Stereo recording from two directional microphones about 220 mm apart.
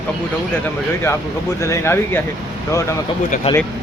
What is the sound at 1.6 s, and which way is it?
Speech, 10° left (ahead or behind).